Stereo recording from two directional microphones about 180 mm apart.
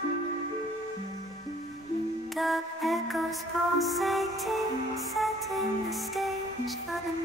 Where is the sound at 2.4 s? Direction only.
Centre (ahead or behind).